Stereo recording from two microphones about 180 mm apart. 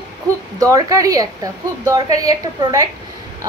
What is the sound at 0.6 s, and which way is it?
A woman's voice, 20° right (ahead or behind).